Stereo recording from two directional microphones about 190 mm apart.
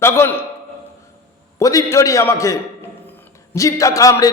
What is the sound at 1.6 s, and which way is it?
A man's voice, 15° left (ahead or behind).